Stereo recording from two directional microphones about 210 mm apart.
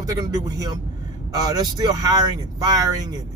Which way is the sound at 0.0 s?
15° right (ahead or behind).